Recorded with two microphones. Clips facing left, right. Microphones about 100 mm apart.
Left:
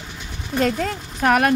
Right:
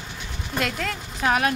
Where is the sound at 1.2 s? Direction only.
55° left (ahead or behind).